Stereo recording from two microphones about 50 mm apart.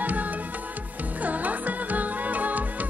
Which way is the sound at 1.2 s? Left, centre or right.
Right.